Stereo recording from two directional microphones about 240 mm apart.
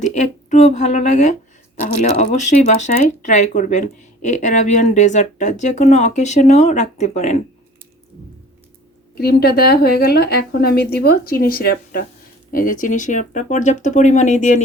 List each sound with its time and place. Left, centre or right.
0.0 s speech: left
9.1 s speech: left